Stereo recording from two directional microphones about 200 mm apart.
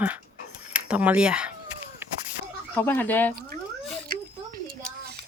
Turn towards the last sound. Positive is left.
turn(degrees=-50)  # may be behind; listen again after turning